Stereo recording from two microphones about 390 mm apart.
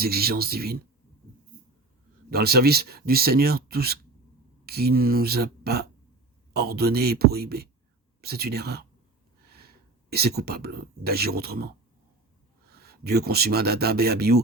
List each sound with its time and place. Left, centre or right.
0.0 s speech: right
2.3 s speech: right